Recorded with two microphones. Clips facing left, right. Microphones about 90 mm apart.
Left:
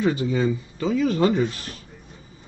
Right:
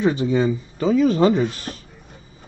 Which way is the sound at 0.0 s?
25° right (ahead or behind).